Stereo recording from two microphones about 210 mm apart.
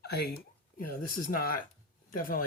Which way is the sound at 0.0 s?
50° left (ahead or behind).